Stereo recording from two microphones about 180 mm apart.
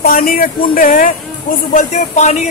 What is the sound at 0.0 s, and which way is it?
Speech, 55° left (ahead or behind).